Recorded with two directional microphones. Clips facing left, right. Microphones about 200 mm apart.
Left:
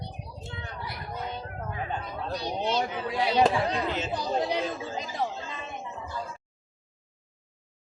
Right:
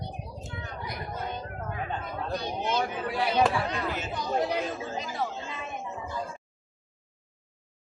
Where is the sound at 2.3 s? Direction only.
50° right (ahead or behind).